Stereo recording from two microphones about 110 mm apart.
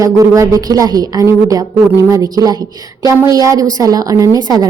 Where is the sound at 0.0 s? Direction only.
30° right (ahead or behind).